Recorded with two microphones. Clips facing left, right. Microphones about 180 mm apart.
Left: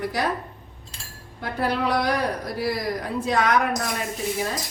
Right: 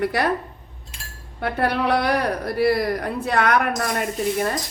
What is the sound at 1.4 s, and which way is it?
Speech, 65° right (ahead or behind).